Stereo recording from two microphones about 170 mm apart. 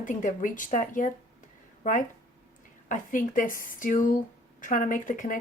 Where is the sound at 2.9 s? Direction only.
50° left (ahead or behind).